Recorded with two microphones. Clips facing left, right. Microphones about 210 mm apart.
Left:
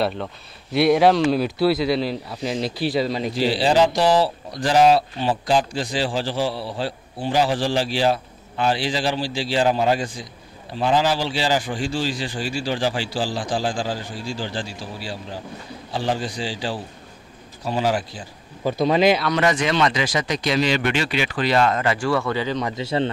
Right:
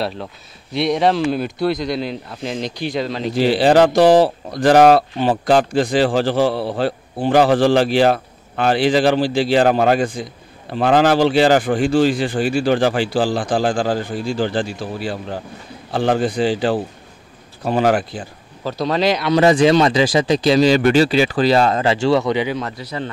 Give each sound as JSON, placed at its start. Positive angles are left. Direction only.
{"t": 0.0, "sound": "speech", "side_deg": 0}
{"t": 3.3, "sound": "speech", "side_deg": -55}
{"t": 18.6, "sound": "speech", "side_deg": 15}
{"t": 19.2, "sound": "speech", "side_deg": -30}
{"t": 22.8, "sound": "speech", "side_deg": 25}